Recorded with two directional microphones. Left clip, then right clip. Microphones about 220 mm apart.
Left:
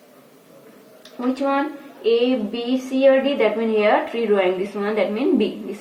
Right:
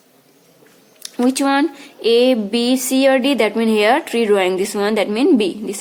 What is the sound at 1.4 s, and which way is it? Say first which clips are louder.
A woman's voice: right 4 dB; 40° right (ahead or behind).